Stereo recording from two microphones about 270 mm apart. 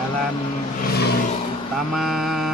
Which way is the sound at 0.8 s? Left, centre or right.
Left.